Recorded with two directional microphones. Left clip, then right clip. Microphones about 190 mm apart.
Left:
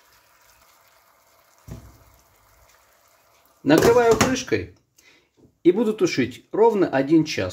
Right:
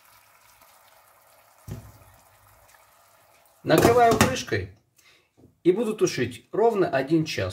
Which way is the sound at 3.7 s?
20° left (ahead or behind).